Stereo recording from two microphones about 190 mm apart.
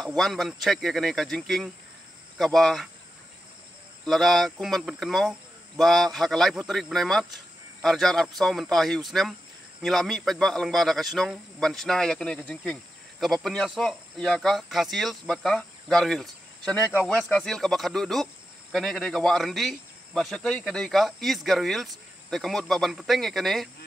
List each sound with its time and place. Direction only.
0.2 s speech: centre (ahead or behind)
4.0 s speech: centre (ahead or behind)